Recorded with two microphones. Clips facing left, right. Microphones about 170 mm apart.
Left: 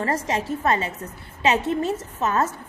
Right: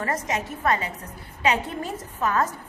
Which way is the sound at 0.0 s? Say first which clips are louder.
Left 3 dB; 30° left (ahead or behind).